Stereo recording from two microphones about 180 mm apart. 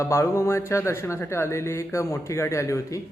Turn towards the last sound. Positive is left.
turn(degrees=15)  # may be behind; listen again after turning